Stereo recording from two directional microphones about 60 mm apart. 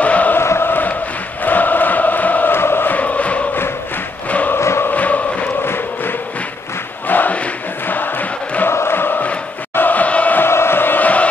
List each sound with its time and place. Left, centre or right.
0.0 s chant: left
0.4 s chant: left
2.5 s chant: left
4.3 s crowd: left
4.6 s music: left
4.8 s chant: left
7.1 s chant: left
8.6 s chant: left
9.8 s crowd: left
10.4 s a sound: left